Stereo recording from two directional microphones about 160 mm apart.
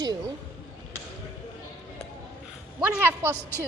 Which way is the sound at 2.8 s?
15° right (ahead or behind).